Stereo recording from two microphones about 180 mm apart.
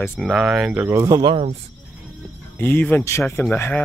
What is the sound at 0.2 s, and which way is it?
Speech, 5° right (ahead or behind).